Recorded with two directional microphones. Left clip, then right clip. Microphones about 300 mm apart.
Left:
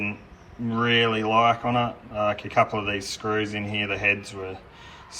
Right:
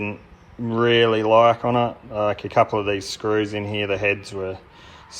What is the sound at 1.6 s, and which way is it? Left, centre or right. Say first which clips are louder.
Speech: right 4 dB; centre.